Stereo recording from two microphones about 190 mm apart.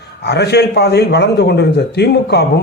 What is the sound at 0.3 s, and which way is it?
A man's voice, 60° left (ahead or behind).